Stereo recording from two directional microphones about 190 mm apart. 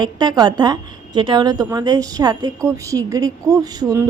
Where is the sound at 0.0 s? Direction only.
20° right (ahead or behind).